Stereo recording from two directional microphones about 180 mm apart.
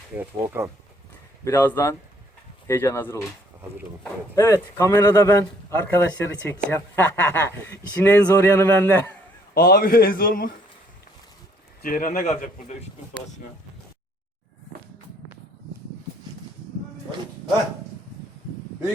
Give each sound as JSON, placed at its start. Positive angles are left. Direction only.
{"t": 0.1, "sound": "speech", "side_deg": -10}
{"t": 1.5, "sound": "speech", "side_deg": 15}
{"t": 4.4, "sound": "speech", "side_deg": 15}
{"t": 9.6, "sound": "a man's voice", "side_deg": 55}
{"t": 11.8, "sound": "a man's voice", "side_deg": 45}